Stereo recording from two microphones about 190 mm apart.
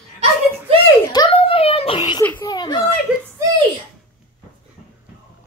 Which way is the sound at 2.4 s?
20° left (ahead or behind).